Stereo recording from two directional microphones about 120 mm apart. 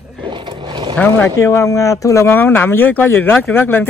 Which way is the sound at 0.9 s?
15° left (ahead or behind).